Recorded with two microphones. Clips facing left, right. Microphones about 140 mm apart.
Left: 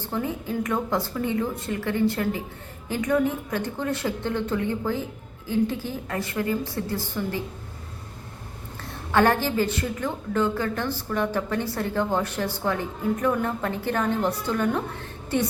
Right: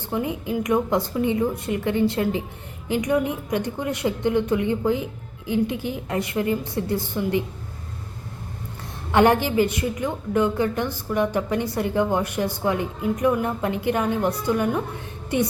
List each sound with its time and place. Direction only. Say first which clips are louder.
0.0 s a woman's voice: right 2 dB; 15° right (ahead or behind)
9.1 s a woman's voice: right 3 dB; 15° right (ahead or behind)